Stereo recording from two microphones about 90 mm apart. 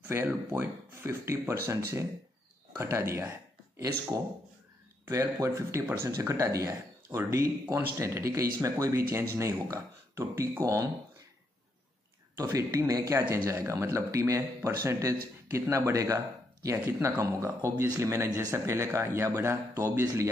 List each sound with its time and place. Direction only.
0.1 s speech: 30° right (ahead or behind)
5.1 s speech: 30° right (ahead or behind)
12.4 s speech: 30° right (ahead or behind)